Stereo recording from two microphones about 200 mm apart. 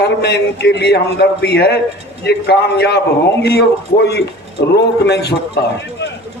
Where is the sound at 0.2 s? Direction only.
55° left (ahead or behind).